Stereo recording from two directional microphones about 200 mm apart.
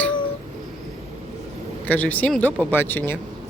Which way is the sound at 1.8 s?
10° left (ahead or behind).